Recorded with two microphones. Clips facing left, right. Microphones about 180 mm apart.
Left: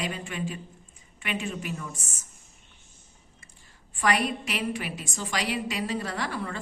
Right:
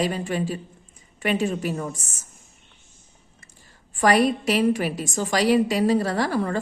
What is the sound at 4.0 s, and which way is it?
A woman's voice, 40° right (ahead or behind).